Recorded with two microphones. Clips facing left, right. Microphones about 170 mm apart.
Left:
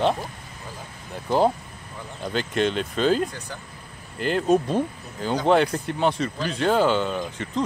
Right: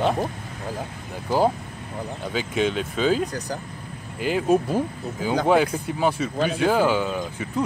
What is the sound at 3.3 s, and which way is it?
Speech, 40° right (ahead or behind).